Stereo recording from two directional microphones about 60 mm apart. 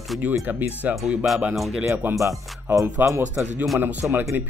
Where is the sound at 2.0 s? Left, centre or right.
Right.